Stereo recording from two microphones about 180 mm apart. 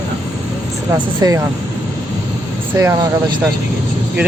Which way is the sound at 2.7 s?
15° right (ahead or behind).